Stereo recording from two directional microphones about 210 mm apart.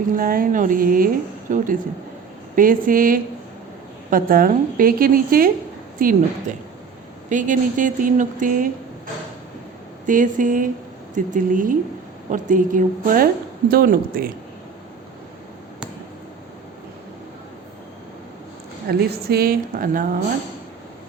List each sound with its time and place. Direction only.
0.1 s a woman's voice: 40° right (ahead or behind)
10.1 s a woman's voice: 40° right (ahead or behind)
18.9 s a woman's voice: 50° right (ahead or behind)